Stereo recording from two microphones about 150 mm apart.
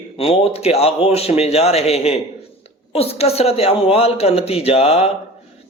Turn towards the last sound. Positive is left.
turn(degrees=45)  # may be behind; listen again after turning